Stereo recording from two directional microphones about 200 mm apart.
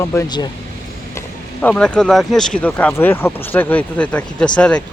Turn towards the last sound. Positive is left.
turn(degrees=5)  # may be behind; listen again after turning